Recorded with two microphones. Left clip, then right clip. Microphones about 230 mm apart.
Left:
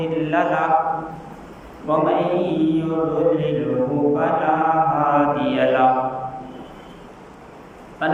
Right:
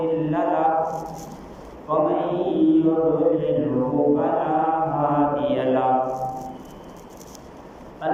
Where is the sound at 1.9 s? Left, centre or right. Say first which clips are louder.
Left 3 dB; left.